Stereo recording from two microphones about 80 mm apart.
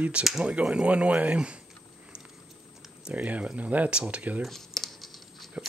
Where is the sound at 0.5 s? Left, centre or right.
Centre.